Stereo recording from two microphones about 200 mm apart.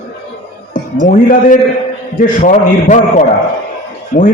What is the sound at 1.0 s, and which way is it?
A man's voice, 40° left (ahead or behind).